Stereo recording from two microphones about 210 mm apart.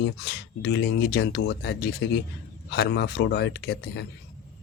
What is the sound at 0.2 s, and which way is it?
Speech, 50° left (ahead or behind).